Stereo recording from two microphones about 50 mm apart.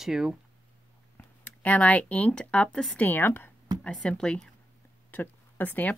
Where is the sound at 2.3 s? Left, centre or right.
Left.